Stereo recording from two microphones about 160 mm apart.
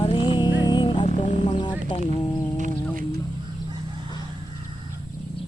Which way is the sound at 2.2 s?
25° left (ahead or behind).